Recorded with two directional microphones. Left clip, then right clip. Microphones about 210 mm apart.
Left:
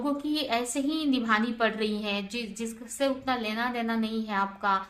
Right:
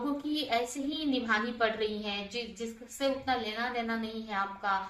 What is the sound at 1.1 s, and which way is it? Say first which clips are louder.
A woman's voice: left 2 dB; 40° left (ahead or behind).